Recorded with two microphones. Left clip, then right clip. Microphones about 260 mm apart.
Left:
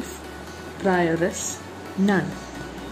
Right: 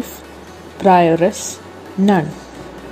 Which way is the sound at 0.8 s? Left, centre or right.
Right.